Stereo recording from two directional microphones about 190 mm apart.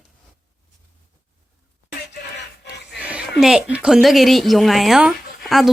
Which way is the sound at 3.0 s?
5° right (ahead or behind).